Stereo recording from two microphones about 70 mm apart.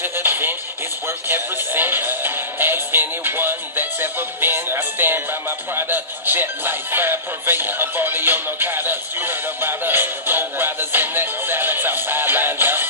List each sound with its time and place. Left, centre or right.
0.0 s music: right
5.8 s speech: right